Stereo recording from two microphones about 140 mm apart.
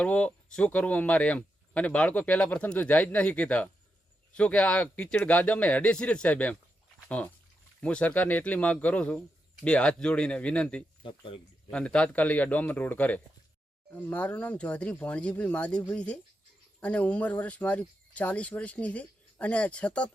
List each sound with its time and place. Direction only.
0.0 s speech: 10° left (ahead or behind)
11.0 s speech: 35° left (ahead or behind)
11.7 s speech: 5° left (ahead or behind)